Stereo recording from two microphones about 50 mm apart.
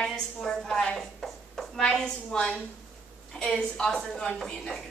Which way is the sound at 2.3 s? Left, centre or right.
Left.